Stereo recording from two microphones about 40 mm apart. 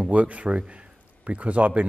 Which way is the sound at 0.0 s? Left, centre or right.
Right.